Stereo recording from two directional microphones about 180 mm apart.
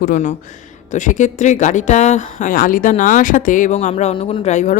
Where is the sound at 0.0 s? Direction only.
45° left (ahead or behind).